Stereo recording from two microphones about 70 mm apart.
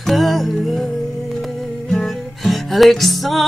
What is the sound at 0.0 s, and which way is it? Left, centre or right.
Music, centre.